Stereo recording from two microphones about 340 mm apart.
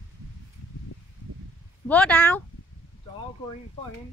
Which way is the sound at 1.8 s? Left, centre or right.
Centre.